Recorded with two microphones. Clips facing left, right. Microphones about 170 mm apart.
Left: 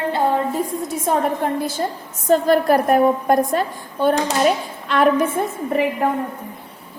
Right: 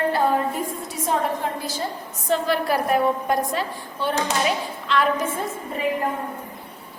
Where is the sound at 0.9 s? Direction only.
50° left (ahead or behind).